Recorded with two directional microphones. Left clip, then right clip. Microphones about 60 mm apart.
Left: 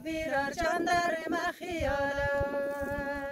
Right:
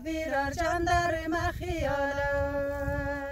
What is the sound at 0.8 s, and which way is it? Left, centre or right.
Music, centre.